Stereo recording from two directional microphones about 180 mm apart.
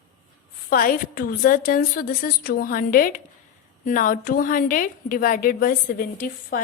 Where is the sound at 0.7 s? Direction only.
50° left (ahead or behind).